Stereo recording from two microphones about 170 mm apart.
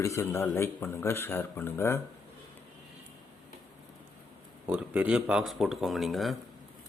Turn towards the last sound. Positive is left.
turn(degrees=0)  # may be behind; listen again after turning